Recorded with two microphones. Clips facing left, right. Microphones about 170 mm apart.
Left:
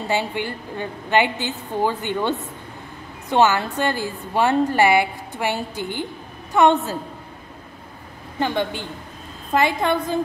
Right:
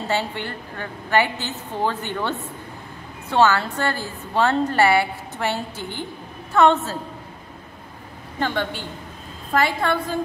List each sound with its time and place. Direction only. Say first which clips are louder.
0.1 s a woman's voice: left 2 dB; 15° left (ahead or behind)
8.4 s a woman's voice: left 2 dB; 15° left (ahead or behind)